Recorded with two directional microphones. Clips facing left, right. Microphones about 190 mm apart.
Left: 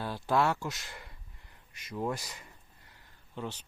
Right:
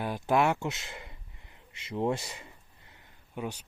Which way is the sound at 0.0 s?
20° right (ahead or behind).